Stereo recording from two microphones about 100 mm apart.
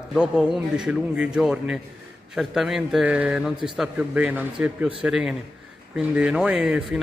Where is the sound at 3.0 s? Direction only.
15° right (ahead or behind).